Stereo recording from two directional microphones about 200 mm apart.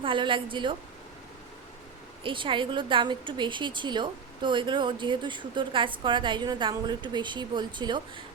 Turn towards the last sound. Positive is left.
turn(degrees=-20)  # may be behind; listen again after turning